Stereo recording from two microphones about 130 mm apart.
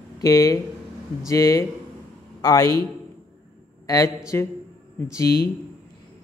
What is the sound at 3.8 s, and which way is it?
Speech, 25° left (ahead or behind).